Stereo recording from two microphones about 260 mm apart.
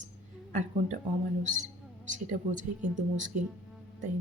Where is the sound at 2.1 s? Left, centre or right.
Right.